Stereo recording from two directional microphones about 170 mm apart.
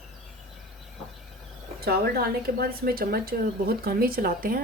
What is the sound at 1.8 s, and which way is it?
A woman's voice, 65° right (ahead or behind).